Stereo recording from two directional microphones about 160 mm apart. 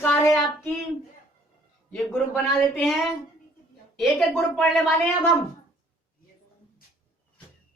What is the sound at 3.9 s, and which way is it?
Speech, centre (ahead or behind).